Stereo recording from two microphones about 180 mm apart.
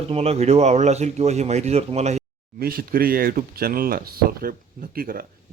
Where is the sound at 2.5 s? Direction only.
55° right (ahead or behind).